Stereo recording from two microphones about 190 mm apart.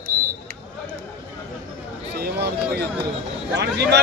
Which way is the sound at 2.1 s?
60° right (ahead or behind).